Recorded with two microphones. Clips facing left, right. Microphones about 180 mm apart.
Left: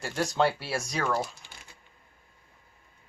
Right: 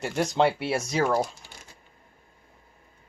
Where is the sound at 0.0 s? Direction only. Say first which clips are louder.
Right 3 dB; 20° right (ahead or behind).